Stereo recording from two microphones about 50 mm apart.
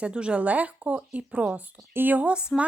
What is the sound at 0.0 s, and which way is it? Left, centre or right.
A woman's voice, right.